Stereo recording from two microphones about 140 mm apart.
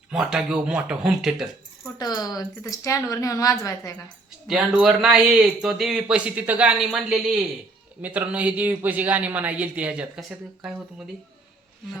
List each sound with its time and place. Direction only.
0.1 s speech: 5° right (ahead or behind)
2.0 s speech: 30° left (ahead or behind)
4.4 s speech: 5° right (ahead or behind)